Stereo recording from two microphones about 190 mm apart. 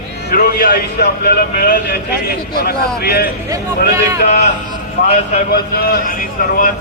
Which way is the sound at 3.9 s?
15° right (ahead or behind).